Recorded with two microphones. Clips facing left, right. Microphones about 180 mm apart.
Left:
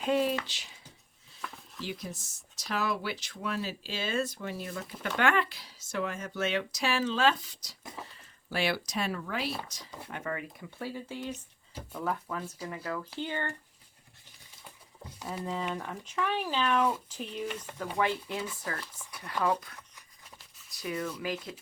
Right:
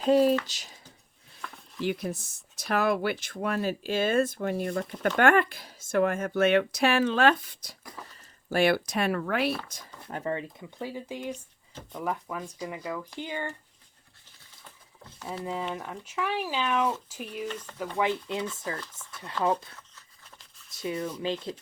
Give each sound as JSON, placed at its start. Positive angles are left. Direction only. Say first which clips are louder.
{"t": 0.0, "sound": "speech", "louder": "right 7 dB", "side_deg": -40}
{"t": 1.4, "sound": "a sound", "louder": "even", "side_deg": 0}
{"t": 1.8, "sound": "speech", "louder": "right 9 dB", "side_deg": -60}
{"t": 10.1, "sound": "speech", "louder": "right 5 dB", "side_deg": -30}
{"t": 10.8, "sound": "speech", "louder": "right 2 dB", "side_deg": -15}
{"t": 14.6, "sound": "patter", "louder": "left 2 dB", "side_deg": 10}
{"t": 15.7, "sound": "speech", "louder": "right 1 dB", "side_deg": -10}
{"t": 17.4, "sound": "speech", "louder": "right 2 dB", "side_deg": 10}
{"t": 18.0, "sound": "speech", "louder": "right 3 dB", "side_deg": -10}
{"t": 20.7, "sound": "speech", "louder": "right 3 dB", "side_deg": -25}